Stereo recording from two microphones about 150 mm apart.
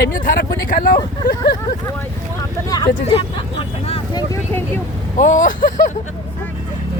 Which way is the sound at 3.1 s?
40° left (ahead or behind).